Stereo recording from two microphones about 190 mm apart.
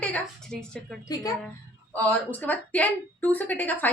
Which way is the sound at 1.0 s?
20° left (ahead or behind).